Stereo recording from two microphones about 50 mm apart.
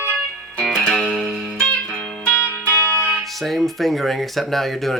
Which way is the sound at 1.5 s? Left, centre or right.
Centre.